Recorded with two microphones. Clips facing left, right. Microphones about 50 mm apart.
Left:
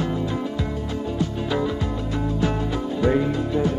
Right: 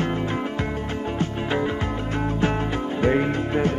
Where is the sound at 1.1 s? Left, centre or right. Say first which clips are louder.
Left 1 dB; right.